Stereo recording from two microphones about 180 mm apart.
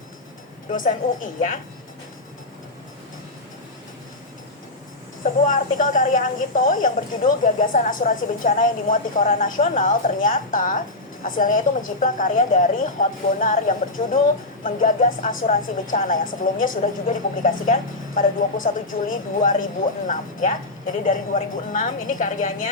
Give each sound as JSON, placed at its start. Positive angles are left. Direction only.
{"t": 0.7, "sound": "a woman's voice", "side_deg": 50}
{"t": 5.2, "sound": "a woman's voice", "side_deg": 45}